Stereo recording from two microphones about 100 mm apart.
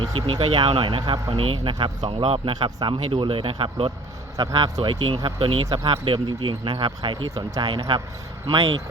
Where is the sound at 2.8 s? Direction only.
45° right (ahead or behind).